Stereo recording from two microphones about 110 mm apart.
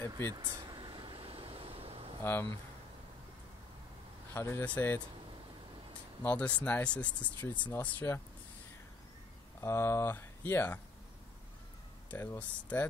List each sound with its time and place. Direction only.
0.3 s a sound: 45° right (ahead or behind); by 2.1 s 60° right (ahead or behind)
2.2 s speech: 20° left (ahead or behind)
4.3 s speech: 25° left (ahead or behind)
4.6 s speech: 15° left (ahead or behind)
6.2 s speech: 15° left (ahead or behind)
9.6 s speech: 25° left (ahead or behind)
12.1 s speech: 15° left (ahead or behind)